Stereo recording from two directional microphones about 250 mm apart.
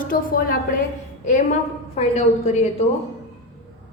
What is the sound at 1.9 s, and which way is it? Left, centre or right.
Speech, left.